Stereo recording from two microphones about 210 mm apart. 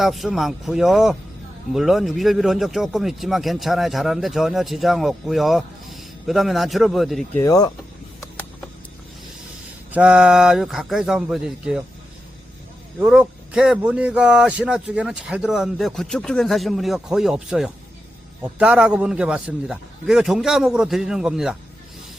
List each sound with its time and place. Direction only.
0.0 s speech: centre (ahead or behind)
7.3 s speech: 15° left (ahead or behind)
9.9 s speech: 5° right (ahead or behind)
13.0 s speech: 5° right (ahead or behind)